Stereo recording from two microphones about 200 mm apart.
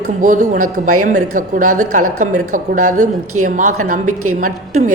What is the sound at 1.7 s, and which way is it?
Speech, 90° right.